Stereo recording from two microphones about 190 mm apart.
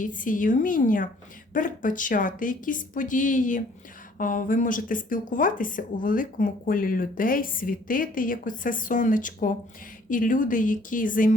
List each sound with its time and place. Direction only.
0.0 s speech: 45° left (ahead or behind)